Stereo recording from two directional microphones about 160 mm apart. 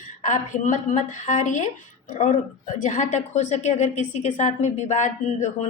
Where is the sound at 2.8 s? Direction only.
50° left (ahead or behind).